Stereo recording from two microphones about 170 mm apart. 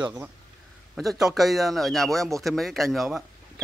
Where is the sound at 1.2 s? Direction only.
Centre (ahead or behind).